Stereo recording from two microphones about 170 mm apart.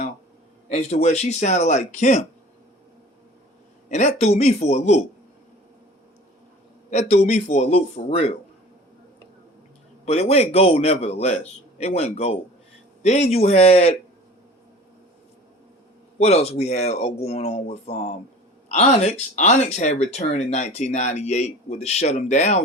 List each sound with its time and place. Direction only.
0.7 s speech: 40° left (ahead or behind)
3.8 s a man's voice: 45° left (ahead or behind)
6.9 s a man's voice: 40° left (ahead or behind)
10.1 s a man's voice: 40° left (ahead or behind)
16.1 s a man's voice: 40° left (ahead or behind)